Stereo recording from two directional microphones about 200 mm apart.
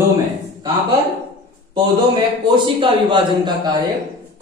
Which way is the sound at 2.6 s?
25° right (ahead or behind).